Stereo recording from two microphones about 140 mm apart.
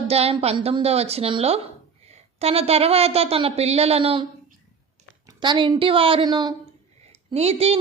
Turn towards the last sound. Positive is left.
turn(degrees=-45)  # may be behind; listen again after turning